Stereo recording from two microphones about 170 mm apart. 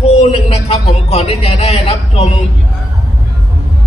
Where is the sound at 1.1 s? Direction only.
35° left (ahead or behind).